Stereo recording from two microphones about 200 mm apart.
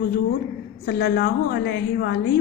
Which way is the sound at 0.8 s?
55° left (ahead or behind).